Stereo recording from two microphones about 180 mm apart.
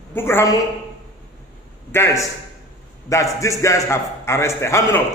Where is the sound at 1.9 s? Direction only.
15° left (ahead or behind).